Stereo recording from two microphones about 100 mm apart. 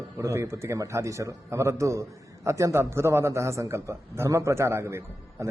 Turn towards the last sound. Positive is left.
turn(degrees=-25)  # may be behind; listen again after turning